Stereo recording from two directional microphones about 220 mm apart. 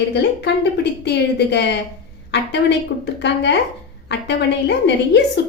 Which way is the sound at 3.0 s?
50° left (ahead or behind).